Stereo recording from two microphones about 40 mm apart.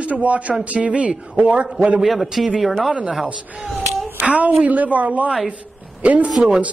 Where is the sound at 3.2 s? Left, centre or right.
Right.